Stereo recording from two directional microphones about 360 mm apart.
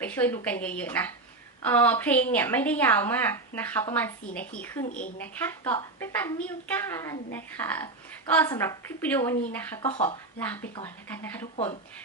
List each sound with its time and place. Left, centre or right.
0.0 s a sound: centre
0.4 s a woman's voice: centre
4.9 s a woman's voice: left
5.2 s a woman's voice: centre